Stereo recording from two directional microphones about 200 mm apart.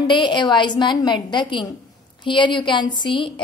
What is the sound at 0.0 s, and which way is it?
A woman's voice, 25° left (ahead or behind).